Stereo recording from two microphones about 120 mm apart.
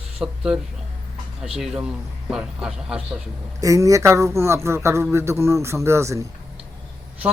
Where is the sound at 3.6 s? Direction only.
25° right (ahead or behind).